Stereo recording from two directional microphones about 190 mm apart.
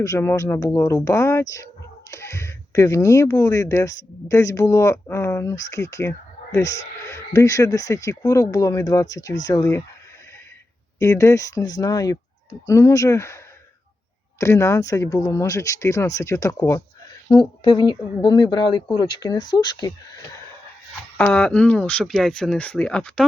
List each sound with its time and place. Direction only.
0.0 s speech: 15° left (ahead or behind)
11.0 s speech: 15° left (ahead or behind)
21.2 s speech: 5° left (ahead or behind)